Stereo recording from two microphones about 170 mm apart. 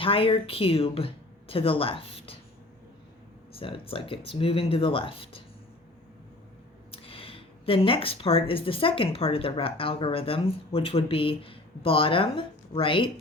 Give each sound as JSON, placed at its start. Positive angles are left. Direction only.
{"t": 0.0, "sound": "speech", "side_deg": 30}
{"t": 3.6, "sound": "speech", "side_deg": 30}
{"t": 6.9, "sound": "speech", "side_deg": 35}